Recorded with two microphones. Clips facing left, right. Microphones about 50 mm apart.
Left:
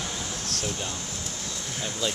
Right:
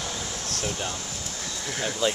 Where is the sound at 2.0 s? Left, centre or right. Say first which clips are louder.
Right 5 dB; right.